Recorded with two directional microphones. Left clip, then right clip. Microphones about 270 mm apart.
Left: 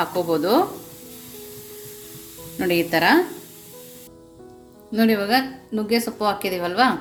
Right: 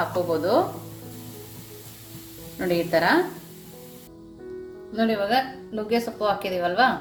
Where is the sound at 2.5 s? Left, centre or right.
Left.